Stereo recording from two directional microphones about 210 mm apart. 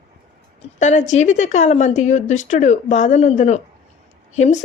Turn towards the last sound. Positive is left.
turn(degrees=35)  # may be behind; listen again after turning